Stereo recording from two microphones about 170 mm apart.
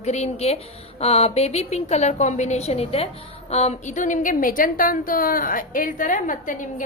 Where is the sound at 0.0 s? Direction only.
40° left (ahead or behind).